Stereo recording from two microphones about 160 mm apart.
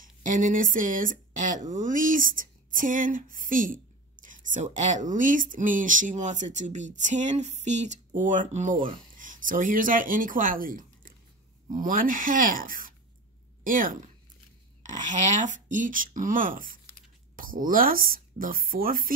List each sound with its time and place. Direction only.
0.0 s speech: 55° right (ahead or behind)